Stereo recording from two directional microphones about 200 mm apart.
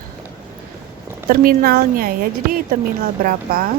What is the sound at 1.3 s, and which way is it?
Speech, 45° right (ahead or behind).